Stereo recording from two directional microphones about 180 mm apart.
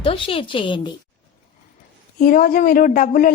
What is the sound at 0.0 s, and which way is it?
Speech, 30° left (ahead or behind).